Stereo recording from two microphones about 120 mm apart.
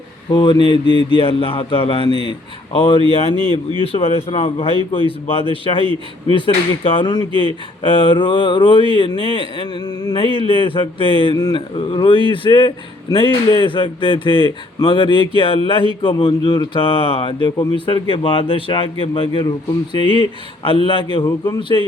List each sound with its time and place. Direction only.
0.3 s speech: 40° left (ahead or behind)
3.3 s speech: 40° right (ahead or behind)
3.9 s speech: 50° left (ahead or behind); by 10.2 s 35° left (ahead or behind)
10.4 s a man's voice: 45° left (ahead or behind)